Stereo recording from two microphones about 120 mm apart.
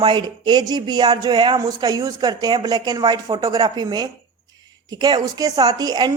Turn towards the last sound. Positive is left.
turn(degrees=-35)  # may be behind; listen again after turning